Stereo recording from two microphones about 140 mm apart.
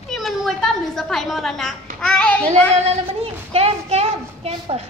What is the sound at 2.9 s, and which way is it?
A woman's voice, 45° right (ahead or behind).